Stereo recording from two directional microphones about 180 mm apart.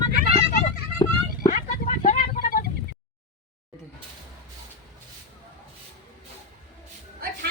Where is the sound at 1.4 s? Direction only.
50° left (ahead or behind).